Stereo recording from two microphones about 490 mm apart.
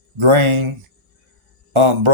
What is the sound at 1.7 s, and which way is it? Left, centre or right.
Speech, right.